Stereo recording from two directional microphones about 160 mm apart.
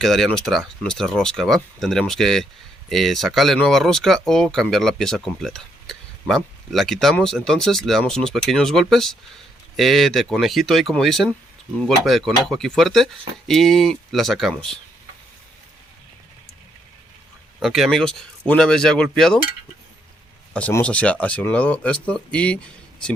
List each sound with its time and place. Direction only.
0.0 s speech: centre (ahead or behind)
17.6 s speech: centre (ahead or behind)
20.5 s speech: 10° left (ahead or behind)